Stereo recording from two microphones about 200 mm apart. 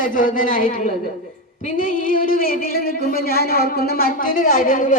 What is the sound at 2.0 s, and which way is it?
Music, 45° left (ahead or behind).